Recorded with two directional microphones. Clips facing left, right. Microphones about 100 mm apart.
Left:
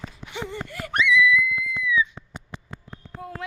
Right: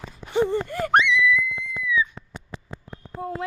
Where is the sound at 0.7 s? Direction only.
45° right (ahead or behind).